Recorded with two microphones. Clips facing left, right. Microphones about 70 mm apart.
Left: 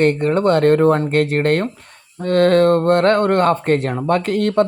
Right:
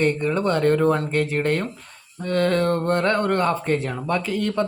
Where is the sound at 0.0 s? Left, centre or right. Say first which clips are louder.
Left 6 dB; left.